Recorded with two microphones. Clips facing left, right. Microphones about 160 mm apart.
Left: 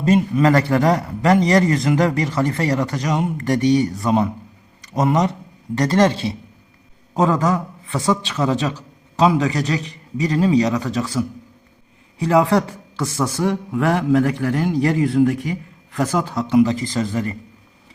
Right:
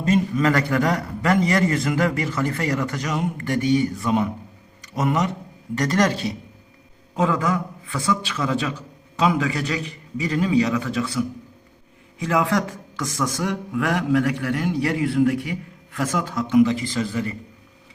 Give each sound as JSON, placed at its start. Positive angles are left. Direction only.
{"t": 0.0, "sound": "a man's voice", "side_deg": 35}
{"t": 12.2, "sound": "a man's voice", "side_deg": 35}